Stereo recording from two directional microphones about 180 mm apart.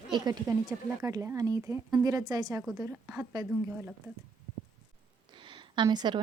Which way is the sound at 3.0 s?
5° right (ahead or behind).